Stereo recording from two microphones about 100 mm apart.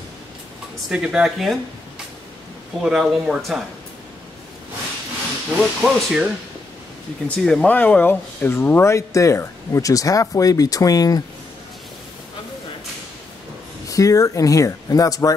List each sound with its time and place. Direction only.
0.8 s speech: 10° right (ahead or behind)
2.8 s speech: 5° right (ahead or behind)
5.6 s speech: centre (ahead or behind)
7.2 s speech: 10° left (ahead or behind)
8.9 s speech: 30° left (ahead or behind)
13.8 s speech: 35° left (ahead or behind)